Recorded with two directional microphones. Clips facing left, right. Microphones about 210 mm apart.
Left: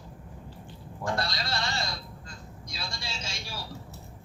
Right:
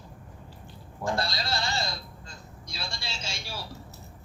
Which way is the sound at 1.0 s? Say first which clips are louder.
Right 1 dB; 25° right (ahead or behind).